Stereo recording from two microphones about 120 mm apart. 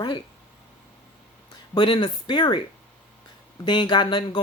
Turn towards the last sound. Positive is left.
turn(degrees=40)  # may be behind; listen again after turning